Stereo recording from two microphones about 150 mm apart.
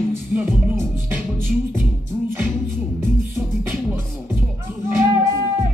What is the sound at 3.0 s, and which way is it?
Music, 15° right (ahead or behind).